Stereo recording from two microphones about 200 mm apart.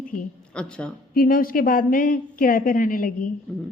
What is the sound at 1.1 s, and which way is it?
A woman's voice, 45° left (ahead or behind).